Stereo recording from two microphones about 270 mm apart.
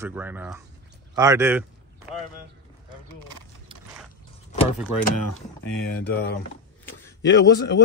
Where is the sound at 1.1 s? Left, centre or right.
Centre.